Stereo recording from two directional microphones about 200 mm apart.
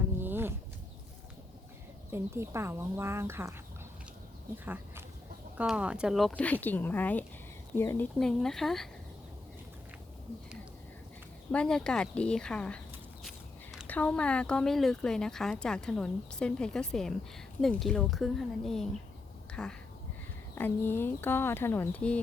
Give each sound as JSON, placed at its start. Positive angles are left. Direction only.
{"t": 0.2, "sound": "a sound", "side_deg": -10}
{"t": 2.0, "sound": "speech", "side_deg": -10}
{"t": 4.6, "sound": "speech", "side_deg": -10}
{"t": 11.5, "sound": "speech", "side_deg": 5}
{"t": 13.2, "sound": "walk", "side_deg": 0}
{"t": 13.8, "sound": "speech", "side_deg": 10}